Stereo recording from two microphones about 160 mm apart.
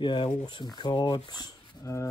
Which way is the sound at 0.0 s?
30° left (ahead or behind).